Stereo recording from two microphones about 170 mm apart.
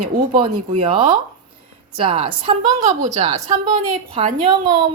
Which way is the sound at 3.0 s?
45° right (ahead or behind).